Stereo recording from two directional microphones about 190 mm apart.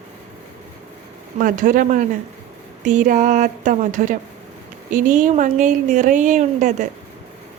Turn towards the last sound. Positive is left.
turn(degrees=-40)  # may be behind; listen again after turning